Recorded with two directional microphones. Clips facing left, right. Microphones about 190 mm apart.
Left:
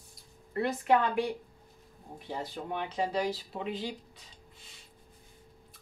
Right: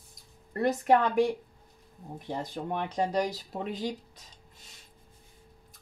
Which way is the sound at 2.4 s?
40° right (ahead or behind).